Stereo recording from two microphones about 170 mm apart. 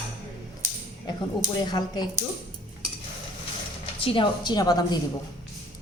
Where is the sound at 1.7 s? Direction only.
25° left (ahead or behind).